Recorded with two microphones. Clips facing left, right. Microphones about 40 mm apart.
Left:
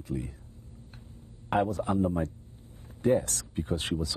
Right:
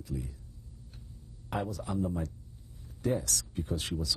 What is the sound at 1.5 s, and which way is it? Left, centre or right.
Speech, left.